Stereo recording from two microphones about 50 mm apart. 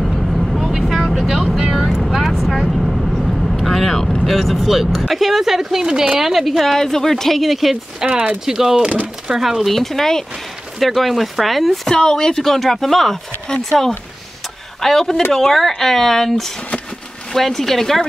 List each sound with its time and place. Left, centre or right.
0.0 s vehicle: centre
3.6 s speech: centre
8.0 s speech: centre
9.7 s speech: centre
11.9 s speech: centre